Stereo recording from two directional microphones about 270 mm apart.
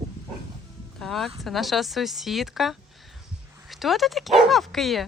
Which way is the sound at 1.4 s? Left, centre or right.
Centre.